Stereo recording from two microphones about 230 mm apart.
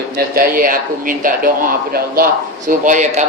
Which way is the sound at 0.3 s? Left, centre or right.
Right.